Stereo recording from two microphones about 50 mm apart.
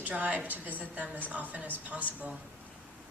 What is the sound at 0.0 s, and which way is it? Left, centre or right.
A woman's voice, right.